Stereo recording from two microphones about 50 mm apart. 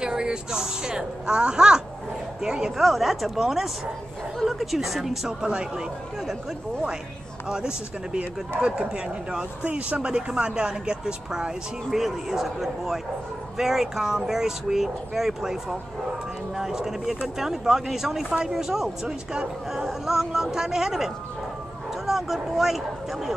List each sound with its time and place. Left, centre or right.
0.0 s a sound: centre
2.4 s speech: centre
2.8 s a man's voice: centre
5.4 s speech: centre
7.4 s speech: centre
12.0 s a man's voice: centre